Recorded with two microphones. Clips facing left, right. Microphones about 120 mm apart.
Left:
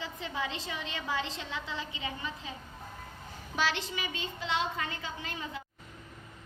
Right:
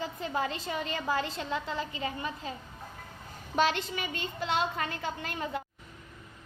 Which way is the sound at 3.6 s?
50° right (ahead or behind).